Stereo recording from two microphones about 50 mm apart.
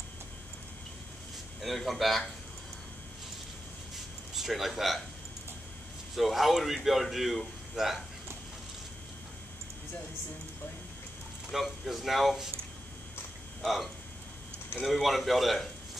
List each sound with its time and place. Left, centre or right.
1.6 s speech: centre
3.9 s a sound: centre
6.1 s speech: centre
11.5 s speech: centre
13.6 s speech: centre